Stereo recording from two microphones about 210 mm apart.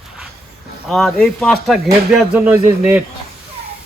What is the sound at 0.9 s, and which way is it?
Speech, centre (ahead or behind).